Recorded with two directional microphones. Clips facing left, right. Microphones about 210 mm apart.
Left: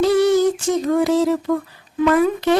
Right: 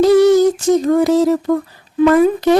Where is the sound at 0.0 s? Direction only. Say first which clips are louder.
Right 5 dB; 40° right (ahead or behind).